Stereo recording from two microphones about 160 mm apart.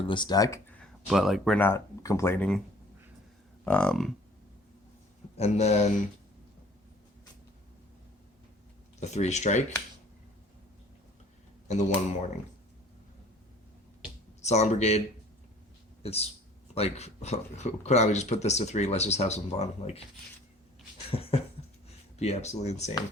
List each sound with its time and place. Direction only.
0.1 s speech: 25° left (ahead or behind)
1.1 s speech: centre (ahead or behind)
1.5 s speech: 15° left (ahead or behind)
3.6 s speech: 5° left (ahead or behind)
5.4 s speech: 45° left (ahead or behind)
9.0 s speech: 45° left (ahead or behind)
11.7 s speech: 45° left (ahead or behind)
14.4 s speech: 45° left (ahead or behind)
16.0 s speech: 40° left (ahead or behind)
21.1 s a sound: 35° left (ahead or behind)
22.2 s speech: 45° left (ahead or behind)